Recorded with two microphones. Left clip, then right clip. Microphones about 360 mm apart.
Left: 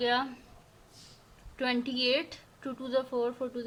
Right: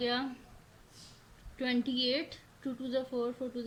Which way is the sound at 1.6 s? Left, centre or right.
Centre.